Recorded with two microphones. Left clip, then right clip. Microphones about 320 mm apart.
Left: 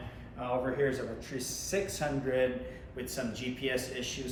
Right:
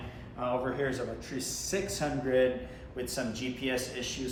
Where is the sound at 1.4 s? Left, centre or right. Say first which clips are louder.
Even; centre.